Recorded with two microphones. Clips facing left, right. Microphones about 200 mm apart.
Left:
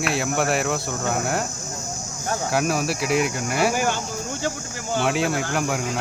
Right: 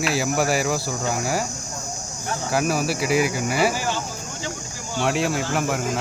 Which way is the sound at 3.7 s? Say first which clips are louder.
Left 3 dB; 60° left (ahead or behind).